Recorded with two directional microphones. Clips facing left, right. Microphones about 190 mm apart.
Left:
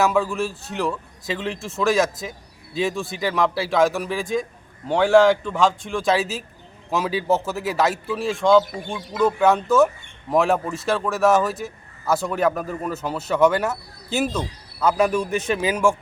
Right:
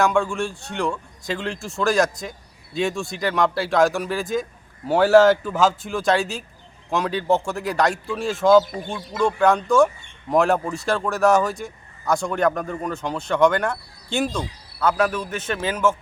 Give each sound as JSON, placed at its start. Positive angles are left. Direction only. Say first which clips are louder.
{"t": 0.0, "sound": "a man's voice", "louder": "even", "side_deg": 5}